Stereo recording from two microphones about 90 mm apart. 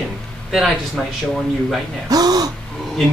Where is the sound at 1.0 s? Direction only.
5° left (ahead or behind).